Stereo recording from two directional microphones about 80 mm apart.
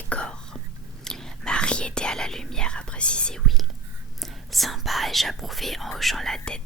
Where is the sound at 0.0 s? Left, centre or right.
Centre.